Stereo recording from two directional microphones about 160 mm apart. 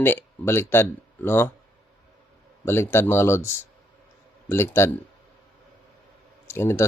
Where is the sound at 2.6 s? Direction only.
15° left (ahead or behind).